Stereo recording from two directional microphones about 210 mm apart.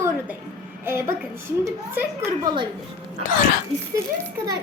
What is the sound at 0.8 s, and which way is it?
A woman's voice, 10° right (ahead or behind).